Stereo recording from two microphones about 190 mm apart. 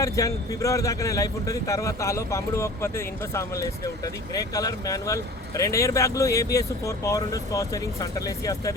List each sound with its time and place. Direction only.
0.0 s speech: 15° left (ahead or behind)